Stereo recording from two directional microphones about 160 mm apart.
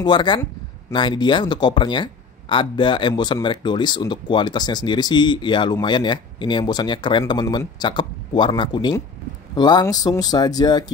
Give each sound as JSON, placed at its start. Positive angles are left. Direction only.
{"t": 0.0, "sound": "speech", "side_deg": 30}